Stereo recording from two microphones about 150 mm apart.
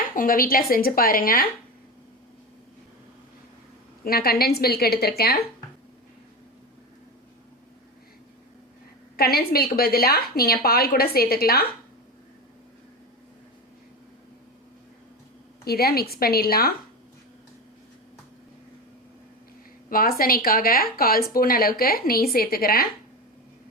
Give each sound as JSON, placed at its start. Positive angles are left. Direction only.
{"t": 0.0, "sound": "speech", "side_deg": 70}
{"t": 4.0, "sound": "a woman's voice", "side_deg": 90}
{"t": 9.1, "sound": "a woman's voice", "side_deg": 90}
{"t": 15.6, "sound": "a woman's voice", "side_deg": 90}
{"t": 19.9, "sound": "a woman's voice", "side_deg": 75}